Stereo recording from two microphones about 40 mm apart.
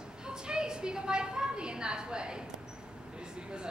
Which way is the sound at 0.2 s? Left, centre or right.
Right.